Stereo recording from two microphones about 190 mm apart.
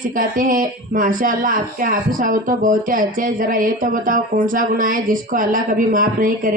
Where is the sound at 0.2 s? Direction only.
45° right (ahead or behind).